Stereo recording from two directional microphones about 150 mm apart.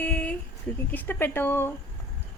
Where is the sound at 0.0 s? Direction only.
10° left (ahead or behind).